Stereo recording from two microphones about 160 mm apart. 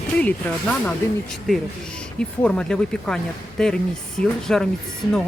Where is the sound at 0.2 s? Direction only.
10° left (ahead or behind).